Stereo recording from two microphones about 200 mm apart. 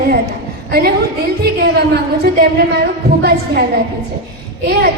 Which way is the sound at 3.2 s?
55° right (ahead or behind).